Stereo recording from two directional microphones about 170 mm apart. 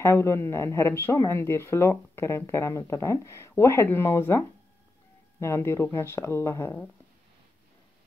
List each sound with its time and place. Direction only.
0.0 s speech: 15° left (ahead or behind)